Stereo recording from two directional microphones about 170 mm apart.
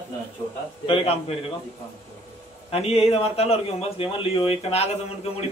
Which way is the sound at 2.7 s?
35° left (ahead or behind).